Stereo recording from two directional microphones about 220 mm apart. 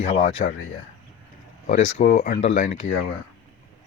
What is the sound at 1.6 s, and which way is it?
Speech, 35° left (ahead or behind).